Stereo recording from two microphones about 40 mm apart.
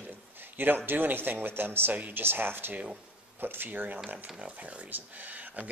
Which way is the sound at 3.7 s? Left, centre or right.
Right.